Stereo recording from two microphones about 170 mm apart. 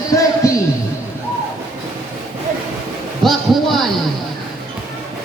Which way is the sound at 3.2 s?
Centre (ahead or behind).